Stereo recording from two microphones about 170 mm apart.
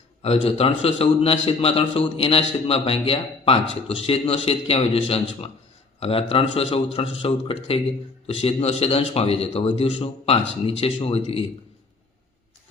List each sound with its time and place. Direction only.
0.2 s a man's voice: 35° left (ahead or behind)